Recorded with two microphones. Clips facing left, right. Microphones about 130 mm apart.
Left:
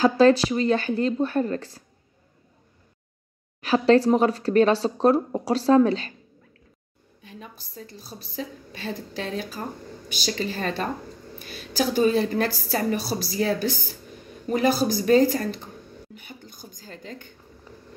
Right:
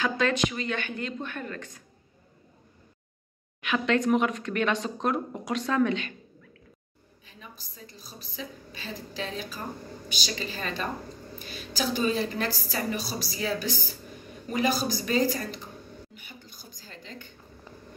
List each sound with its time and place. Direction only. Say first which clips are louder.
0.0 s speech: left 9 dB; 35° left (ahead or behind)
3.6 s speech: left 7 dB; 35° left (ahead or behind)
7.2 s a woman's voice: left 6 dB; 55° left (ahead or behind)
16.2 s a sound: left 5 dB; 50° left (ahead or behind)